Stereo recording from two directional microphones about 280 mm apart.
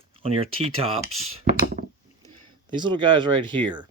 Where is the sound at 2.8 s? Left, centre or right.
Centre.